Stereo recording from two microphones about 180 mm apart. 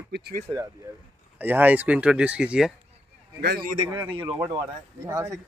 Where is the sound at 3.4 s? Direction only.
65° right (ahead or behind).